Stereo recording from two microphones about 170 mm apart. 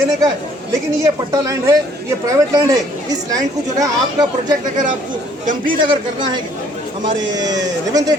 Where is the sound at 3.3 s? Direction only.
20° right (ahead or behind).